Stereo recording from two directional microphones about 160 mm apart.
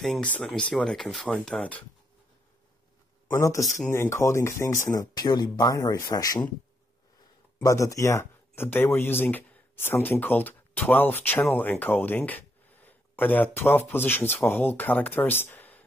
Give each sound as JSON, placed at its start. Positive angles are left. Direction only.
{"t": 0.0, "sound": "speech", "side_deg": 5}
{"t": 3.3, "sound": "speech", "side_deg": 20}
{"t": 7.5, "sound": "speech", "side_deg": 20}